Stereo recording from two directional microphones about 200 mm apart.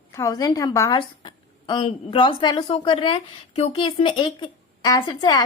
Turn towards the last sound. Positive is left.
turn(degrees=20)  # may be behind; listen again after turning